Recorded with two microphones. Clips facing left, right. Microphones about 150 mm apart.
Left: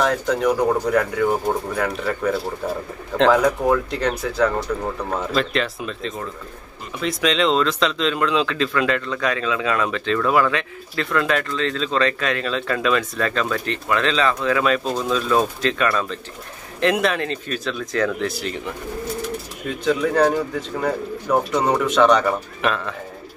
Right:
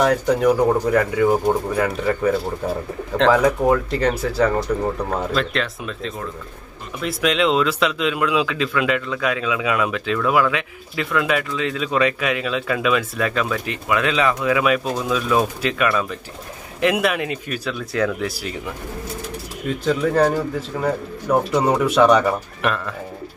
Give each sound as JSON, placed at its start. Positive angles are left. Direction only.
{"t": 0.0, "sound": "speech", "side_deg": -5}
{"t": 19.8, "sound": "speech", "side_deg": 0}